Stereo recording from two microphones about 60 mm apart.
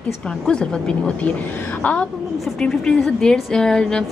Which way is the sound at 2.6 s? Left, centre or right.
Centre.